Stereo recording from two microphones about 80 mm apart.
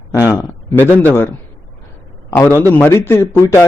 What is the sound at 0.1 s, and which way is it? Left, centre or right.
A man's voice, left.